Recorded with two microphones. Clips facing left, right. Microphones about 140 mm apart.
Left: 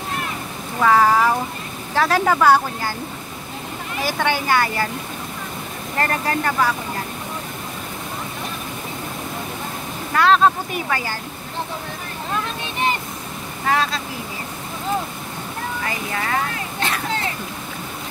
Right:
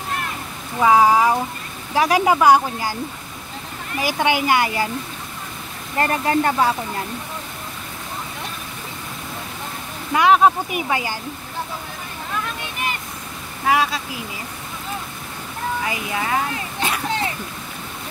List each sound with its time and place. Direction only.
0.7 s speech: 15° right (ahead or behind)
4.0 s speech: 15° right (ahead or behind)
5.9 s speech: 20° right (ahead or behind)
10.1 s speech: 15° right (ahead or behind)
13.7 s speech: 10° right (ahead or behind)
15.8 s speech: 10° right (ahead or behind)